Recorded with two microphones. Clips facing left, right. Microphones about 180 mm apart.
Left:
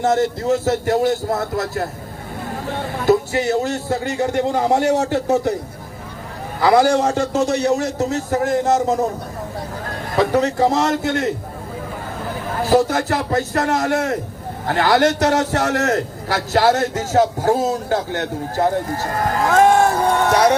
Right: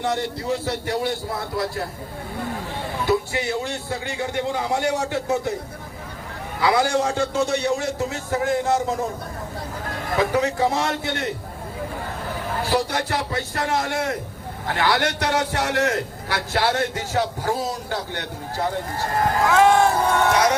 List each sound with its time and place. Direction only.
0.0 s a man's voice: 45° left (ahead or behind)
3.1 s a man's voice: 45° left (ahead or behind)
6.6 s a man's voice: 40° left (ahead or behind)
10.2 s a man's voice: 35° left (ahead or behind)
12.7 s a man's voice: 40° left (ahead or behind)
19.5 s crowd: 50° left (ahead or behind)
20.3 s speech: 30° left (ahead or behind)